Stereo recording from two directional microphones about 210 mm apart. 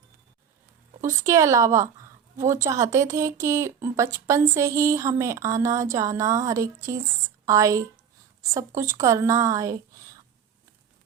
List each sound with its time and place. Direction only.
1.2 s a woman's voice: 15° right (ahead or behind)